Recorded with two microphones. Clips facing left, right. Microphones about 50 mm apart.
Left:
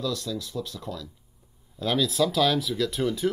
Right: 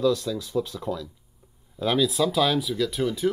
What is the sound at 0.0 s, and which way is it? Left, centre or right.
Speech, centre.